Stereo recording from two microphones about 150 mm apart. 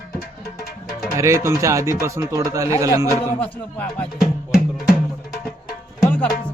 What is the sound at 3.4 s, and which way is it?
Speech, 10° left (ahead or behind).